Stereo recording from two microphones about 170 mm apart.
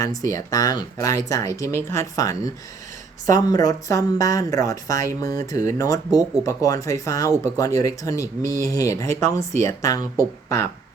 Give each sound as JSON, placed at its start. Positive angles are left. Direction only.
{"t": 0.0, "sound": "speech", "side_deg": 20}